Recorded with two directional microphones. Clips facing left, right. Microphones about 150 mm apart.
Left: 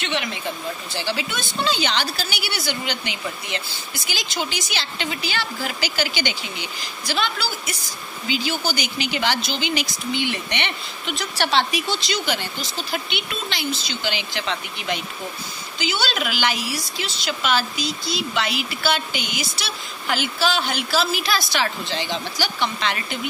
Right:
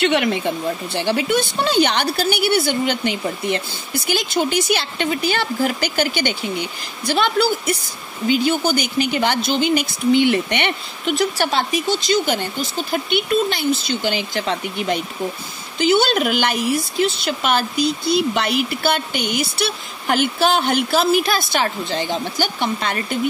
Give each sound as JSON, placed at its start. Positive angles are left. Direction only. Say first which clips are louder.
{"t": 0.1, "sound": "a woman's voice", "louder": "right 8 dB", "side_deg": -55}